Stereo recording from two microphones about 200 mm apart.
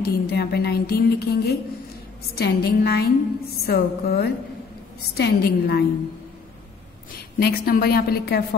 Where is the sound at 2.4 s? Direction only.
50° left (ahead or behind).